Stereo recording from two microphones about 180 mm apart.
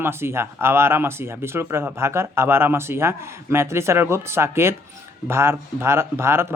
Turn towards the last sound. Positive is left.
turn(degrees=-15)  # may be behind; listen again after turning